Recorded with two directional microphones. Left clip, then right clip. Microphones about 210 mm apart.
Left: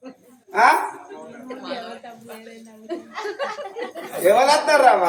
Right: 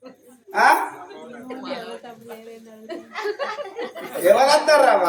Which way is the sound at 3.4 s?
20° right (ahead or behind).